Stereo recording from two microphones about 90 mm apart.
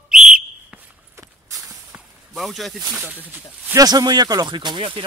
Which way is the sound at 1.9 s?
15° right (ahead or behind).